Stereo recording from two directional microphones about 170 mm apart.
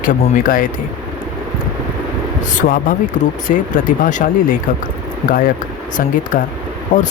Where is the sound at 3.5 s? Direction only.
50° left (ahead or behind).